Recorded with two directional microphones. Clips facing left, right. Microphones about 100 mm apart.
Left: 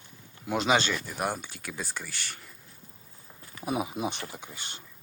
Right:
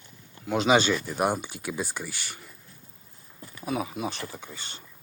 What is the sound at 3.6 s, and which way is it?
Speech, 20° left (ahead or behind).